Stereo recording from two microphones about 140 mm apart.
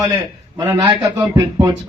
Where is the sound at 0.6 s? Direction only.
20° right (ahead or behind).